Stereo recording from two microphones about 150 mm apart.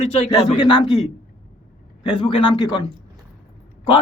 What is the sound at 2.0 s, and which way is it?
Speech, 30° left (ahead or behind).